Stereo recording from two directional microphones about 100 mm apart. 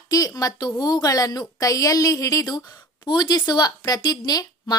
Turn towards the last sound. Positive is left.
turn(degrees=40)  # may be behind; listen again after turning